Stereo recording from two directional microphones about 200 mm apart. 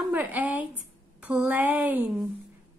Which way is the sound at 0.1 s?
10° right (ahead or behind).